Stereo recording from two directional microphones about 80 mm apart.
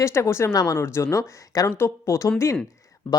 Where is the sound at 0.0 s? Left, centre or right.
Left.